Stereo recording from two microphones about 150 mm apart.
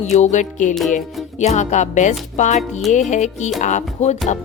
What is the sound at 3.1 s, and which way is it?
Speech, 55° left (ahead or behind).